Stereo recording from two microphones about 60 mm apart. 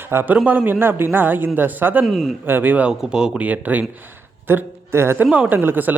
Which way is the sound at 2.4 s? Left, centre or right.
Right.